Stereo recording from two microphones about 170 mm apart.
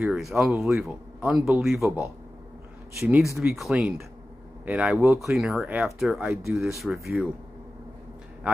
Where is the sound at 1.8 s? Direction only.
15° right (ahead or behind).